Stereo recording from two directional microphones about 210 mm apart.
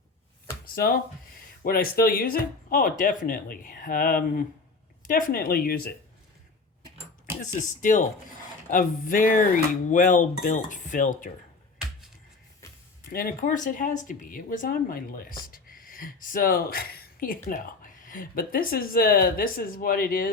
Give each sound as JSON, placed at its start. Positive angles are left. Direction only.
{"t": 0.8, "sound": "speech", "side_deg": 45}
{"t": 7.8, "sound": "speech", "side_deg": 40}
{"t": 13.1, "sound": "speech", "side_deg": 45}